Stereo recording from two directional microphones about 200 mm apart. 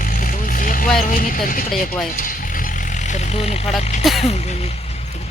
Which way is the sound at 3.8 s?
35° left (ahead or behind).